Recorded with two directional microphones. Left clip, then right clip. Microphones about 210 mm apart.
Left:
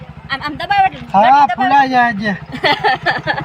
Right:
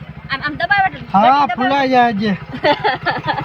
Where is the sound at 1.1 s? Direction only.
15° right (ahead or behind).